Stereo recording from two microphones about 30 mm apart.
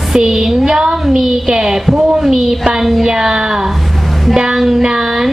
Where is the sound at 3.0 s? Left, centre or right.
Right.